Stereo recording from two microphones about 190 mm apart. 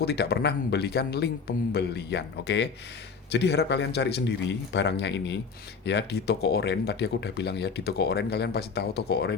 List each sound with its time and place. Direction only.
0.0 s speech: 55° left (ahead or behind)